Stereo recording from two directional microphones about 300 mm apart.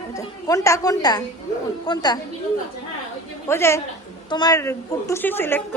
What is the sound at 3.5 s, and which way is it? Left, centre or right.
A woman's voice, centre.